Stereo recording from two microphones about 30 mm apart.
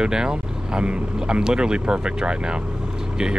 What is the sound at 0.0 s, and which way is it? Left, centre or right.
Speech, right.